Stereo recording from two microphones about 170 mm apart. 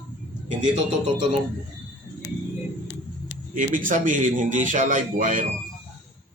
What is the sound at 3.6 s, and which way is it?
A man's voice, 50° right (ahead or behind).